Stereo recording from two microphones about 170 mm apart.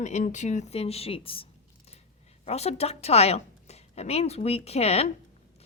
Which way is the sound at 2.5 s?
40° left (ahead or behind).